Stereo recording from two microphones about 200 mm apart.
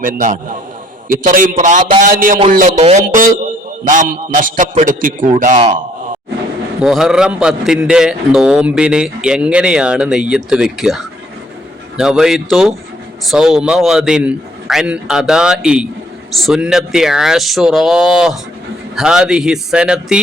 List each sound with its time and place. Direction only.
0.0 s a man's voice: 40° right (ahead or behind)
6.8 s a man's voice: centre (ahead or behind)